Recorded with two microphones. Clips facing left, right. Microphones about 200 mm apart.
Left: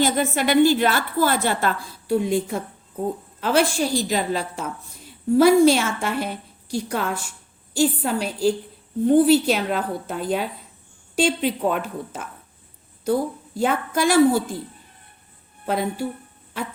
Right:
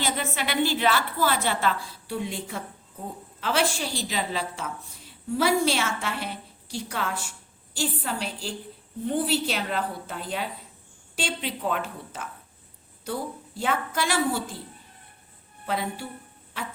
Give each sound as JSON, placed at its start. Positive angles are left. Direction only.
{"t": 0.0, "sound": "a woman's voice", "side_deg": 45}
{"t": 15.6, "sound": "a woman's voice", "side_deg": 45}